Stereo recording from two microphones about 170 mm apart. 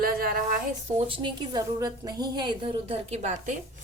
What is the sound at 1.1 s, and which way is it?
A woman's voice, 25° right (ahead or behind).